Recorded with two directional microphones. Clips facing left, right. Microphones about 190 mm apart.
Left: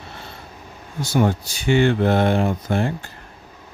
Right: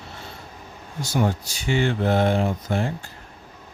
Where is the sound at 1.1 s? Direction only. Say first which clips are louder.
Left 4 dB; 60° left (ahead or behind).